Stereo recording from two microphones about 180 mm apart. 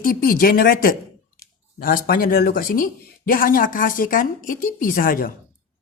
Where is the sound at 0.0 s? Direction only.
55° left (ahead or behind).